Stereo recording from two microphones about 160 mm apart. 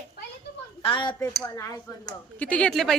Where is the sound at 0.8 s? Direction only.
30° left (ahead or behind).